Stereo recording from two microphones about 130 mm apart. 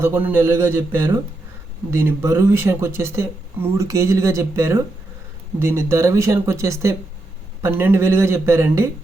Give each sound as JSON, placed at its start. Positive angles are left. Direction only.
{"t": 0.0, "sound": "a man's voice", "side_deg": -15}